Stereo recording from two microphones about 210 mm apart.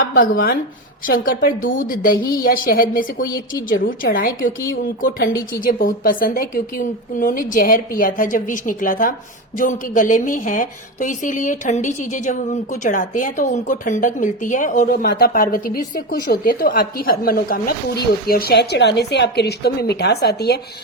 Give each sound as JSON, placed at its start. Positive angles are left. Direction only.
{"t": 0.0, "sound": "a woman's voice", "side_deg": 40}
{"t": 5.5, "sound": "a woman's voice", "side_deg": 40}